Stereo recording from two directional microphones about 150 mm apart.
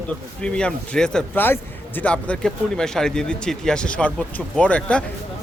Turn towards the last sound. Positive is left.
turn(degrees=10)  # may be behind; listen again after turning